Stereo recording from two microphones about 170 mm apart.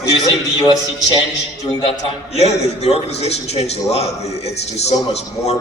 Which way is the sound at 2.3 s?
40° left (ahead or behind).